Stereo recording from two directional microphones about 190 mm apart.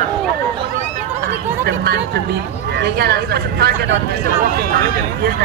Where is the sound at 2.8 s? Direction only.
55° right (ahead or behind).